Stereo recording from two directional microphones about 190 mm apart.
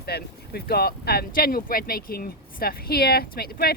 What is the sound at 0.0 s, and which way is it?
Speech, 55° left (ahead or behind).